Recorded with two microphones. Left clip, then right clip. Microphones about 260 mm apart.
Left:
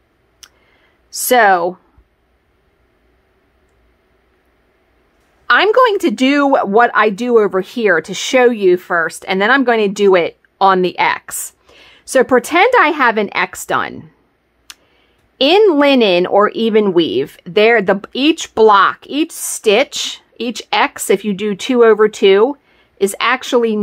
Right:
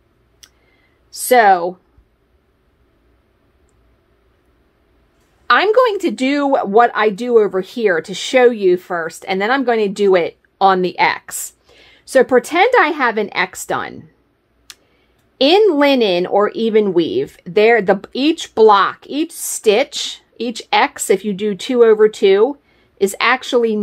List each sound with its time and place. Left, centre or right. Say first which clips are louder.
0.4 s a sound: left 4 dB; centre
1.1 s speech: even; centre
5.5 s speech: left 2 dB; centre
14.7 s tick: left 2 dB; centre
15.3 s speech: left 2 dB; centre